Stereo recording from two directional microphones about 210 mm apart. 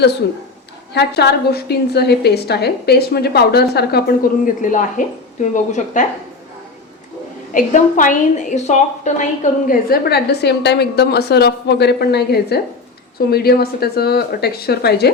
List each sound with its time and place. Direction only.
0.9 s a woman's voice: 50° left (ahead or behind)
4.6 s a woman's voice: 40° left (ahead or behind)
7.5 s a woman's voice: 40° left (ahead or behind)